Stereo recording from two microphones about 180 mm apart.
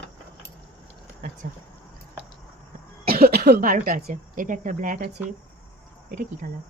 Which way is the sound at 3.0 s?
60° right (ahead or behind).